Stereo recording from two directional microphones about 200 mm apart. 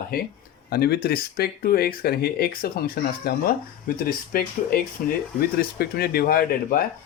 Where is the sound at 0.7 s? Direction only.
50° left (ahead or behind).